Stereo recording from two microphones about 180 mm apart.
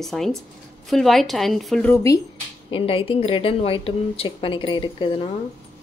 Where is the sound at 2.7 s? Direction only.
30° left (ahead or behind).